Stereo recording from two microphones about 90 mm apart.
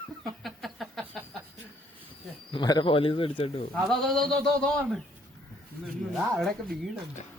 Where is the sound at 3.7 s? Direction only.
Centre (ahead or behind).